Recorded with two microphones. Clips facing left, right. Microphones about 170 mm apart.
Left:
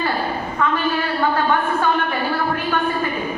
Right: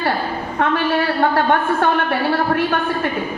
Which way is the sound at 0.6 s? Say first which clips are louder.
Right 2 dB; 70° right (ahead or behind).